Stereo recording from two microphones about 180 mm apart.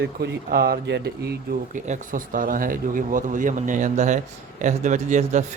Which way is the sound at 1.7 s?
45° right (ahead or behind).